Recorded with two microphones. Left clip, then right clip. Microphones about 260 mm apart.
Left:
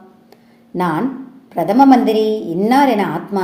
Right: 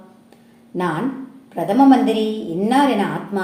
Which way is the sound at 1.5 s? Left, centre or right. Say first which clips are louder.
Left 3 dB; left.